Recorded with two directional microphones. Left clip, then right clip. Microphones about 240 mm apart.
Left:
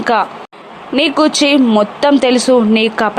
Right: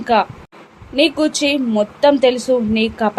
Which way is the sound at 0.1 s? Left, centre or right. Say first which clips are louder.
Left 1 dB; centre.